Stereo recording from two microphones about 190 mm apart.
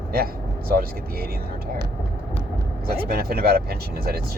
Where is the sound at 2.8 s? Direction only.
55° right (ahead or behind).